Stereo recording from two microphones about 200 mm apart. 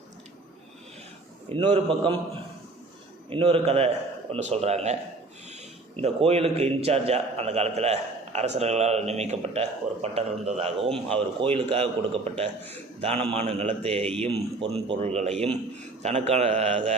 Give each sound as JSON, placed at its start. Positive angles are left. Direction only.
{"t": 1.5, "sound": "a man's voice", "side_deg": -30}
{"t": 6.0, "sound": "a man's voice", "side_deg": -30}